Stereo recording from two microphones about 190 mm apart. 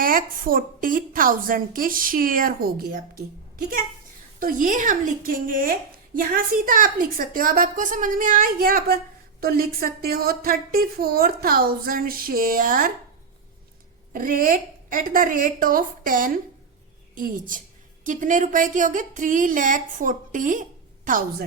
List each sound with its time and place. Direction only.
0.0 s a woman's voice: 45° right (ahead or behind)
4.4 s a woman's voice: 45° right (ahead or behind)
14.1 s a woman's voice: 45° right (ahead or behind)